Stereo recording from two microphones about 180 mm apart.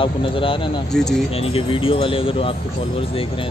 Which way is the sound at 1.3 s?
30° left (ahead or behind).